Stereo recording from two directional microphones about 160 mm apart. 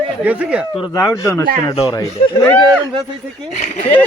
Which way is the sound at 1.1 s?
20° left (ahead or behind).